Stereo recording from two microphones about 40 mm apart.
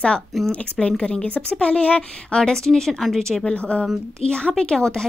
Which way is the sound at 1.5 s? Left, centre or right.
Left.